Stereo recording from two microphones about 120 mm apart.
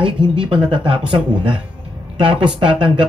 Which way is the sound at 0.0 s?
45° right (ahead or behind).